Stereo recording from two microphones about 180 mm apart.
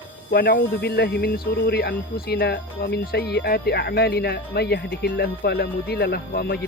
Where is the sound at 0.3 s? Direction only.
55° left (ahead or behind).